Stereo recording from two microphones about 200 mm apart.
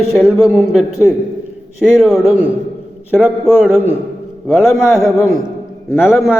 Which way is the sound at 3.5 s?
5° right (ahead or behind).